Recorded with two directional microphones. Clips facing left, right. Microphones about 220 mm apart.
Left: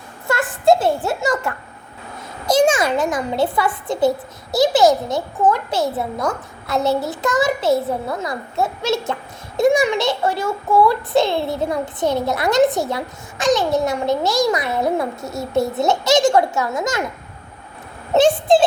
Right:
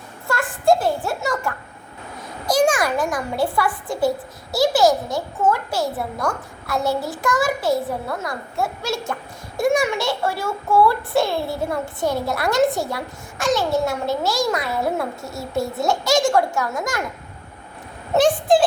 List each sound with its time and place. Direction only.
0.3 s a woman's voice: 20° left (ahead or behind)
18.1 s a child's voice: 25° left (ahead or behind)